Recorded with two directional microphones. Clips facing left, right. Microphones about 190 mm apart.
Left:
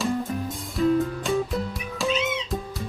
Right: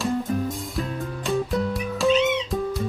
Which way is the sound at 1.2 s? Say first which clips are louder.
Right 2 dB; centre (ahead or behind).